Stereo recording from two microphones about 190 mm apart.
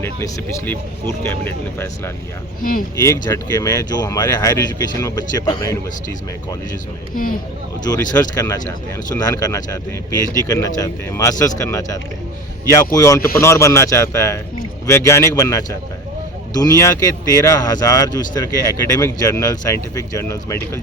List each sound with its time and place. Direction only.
0.0 s speech: 10° left (ahead or behind)
7.9 s speech: 20° left (ahead or behind)